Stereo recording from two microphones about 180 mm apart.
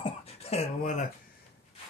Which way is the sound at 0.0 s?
35° left (ahead or behind).